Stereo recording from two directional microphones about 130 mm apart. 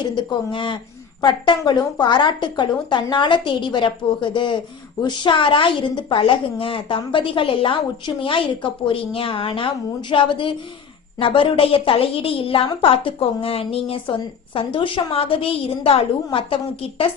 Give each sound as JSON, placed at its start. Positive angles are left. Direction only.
{"t": 0.0, "sound": "a woman's voice", "side_deg": 35}